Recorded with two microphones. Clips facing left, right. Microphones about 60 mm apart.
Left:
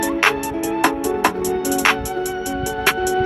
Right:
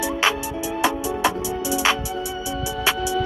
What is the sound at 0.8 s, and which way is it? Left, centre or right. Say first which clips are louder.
Music: left 3 dB; left.